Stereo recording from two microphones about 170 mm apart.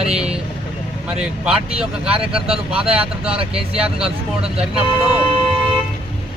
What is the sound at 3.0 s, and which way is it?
Speech, 35° right (ahead or behind).